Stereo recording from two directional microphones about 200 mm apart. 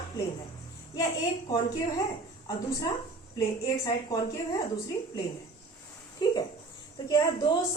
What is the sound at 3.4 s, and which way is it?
Speech, 15° left (ahead or behind).